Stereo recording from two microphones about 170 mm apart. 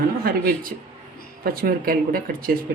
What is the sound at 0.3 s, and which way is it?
A woman's voice, 60° right (ahead or behind).